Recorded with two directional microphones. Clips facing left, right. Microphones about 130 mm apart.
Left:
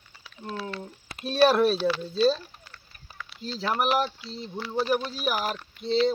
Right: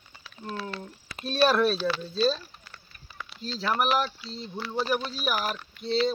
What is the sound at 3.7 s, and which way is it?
Speech, 20° left (ahead or behind).